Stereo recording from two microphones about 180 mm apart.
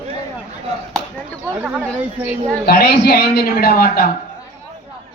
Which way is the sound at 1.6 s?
10° right (ahead or behind).